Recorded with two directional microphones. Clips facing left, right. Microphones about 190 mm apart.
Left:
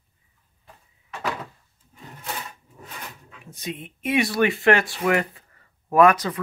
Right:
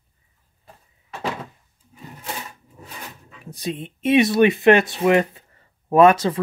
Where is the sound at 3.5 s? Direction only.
35° right (ahead or behind).